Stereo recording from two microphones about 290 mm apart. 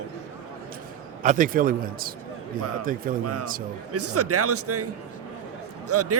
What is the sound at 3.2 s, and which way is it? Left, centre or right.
Speech, right.